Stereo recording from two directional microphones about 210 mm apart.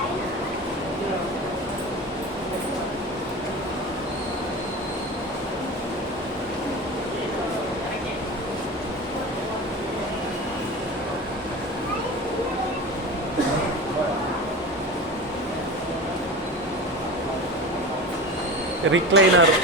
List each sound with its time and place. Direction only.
18.9 s speech: 65° right (ahead or behind)